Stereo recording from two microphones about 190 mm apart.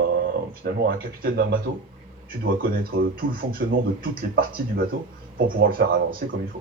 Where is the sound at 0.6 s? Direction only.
50° right (ahead or behind).